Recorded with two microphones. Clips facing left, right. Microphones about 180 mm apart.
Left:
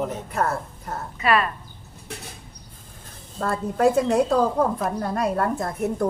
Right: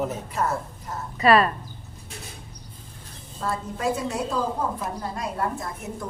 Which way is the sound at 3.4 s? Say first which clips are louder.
Left 7 dB; 55° left (ahead or behind).